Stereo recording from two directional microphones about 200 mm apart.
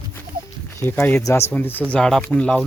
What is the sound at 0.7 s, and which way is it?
Speech, 10° left (ahead or behind).